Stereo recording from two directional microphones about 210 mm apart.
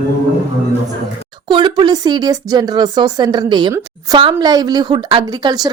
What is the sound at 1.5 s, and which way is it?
Speech, 20° right (ahead or behind).